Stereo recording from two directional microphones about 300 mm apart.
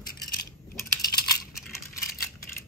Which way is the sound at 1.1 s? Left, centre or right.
Left.